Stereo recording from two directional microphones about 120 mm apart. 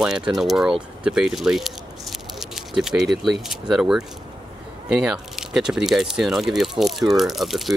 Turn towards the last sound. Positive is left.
turn(degrees=0)  # may be behind; listen again after turning